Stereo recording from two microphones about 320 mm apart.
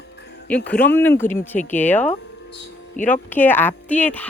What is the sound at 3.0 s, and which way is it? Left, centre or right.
Speech, left.